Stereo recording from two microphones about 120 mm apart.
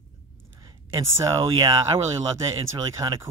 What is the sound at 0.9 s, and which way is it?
Speech, 45° right (ahead or behind).